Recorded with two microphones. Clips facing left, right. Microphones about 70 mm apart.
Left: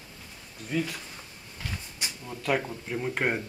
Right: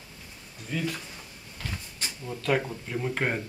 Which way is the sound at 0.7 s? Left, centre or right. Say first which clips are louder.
Left 1 dB; centre.